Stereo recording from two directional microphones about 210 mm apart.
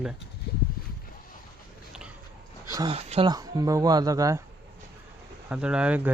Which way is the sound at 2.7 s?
20° right (ahead or behind).